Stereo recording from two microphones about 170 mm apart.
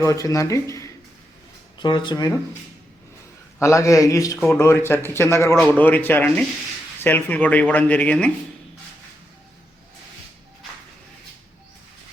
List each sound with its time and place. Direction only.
0.0 s a man's voice: 20° left (ahead or behind)
3.6 s a man's voice: 20° left (ahead or behind)